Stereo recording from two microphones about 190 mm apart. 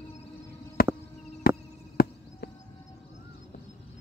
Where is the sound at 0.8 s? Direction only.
50° left (ahead or behind).